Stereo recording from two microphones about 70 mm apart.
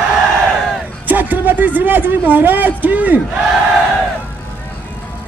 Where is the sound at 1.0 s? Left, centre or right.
Right.